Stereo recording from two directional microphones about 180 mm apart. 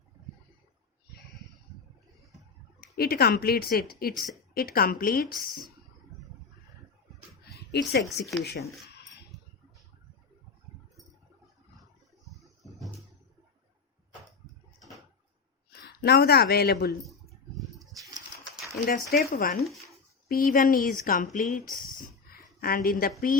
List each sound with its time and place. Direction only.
2.8 s a woman's voice: 60° left (ahead or behind)
7.7 s a woman's voice: 65° left (ahead or behind)
15.8 s speech: 65° left (ahead or behind)
17.1 s bird: centre (ahead or behind)
17.7 s pigeon: 20° right (ahead or behind)
18.9 s speech: 50° left (ahead or behind)